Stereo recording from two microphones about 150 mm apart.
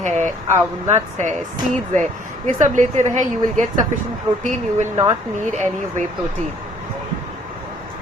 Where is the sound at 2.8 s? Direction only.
55° right (ahead or behind).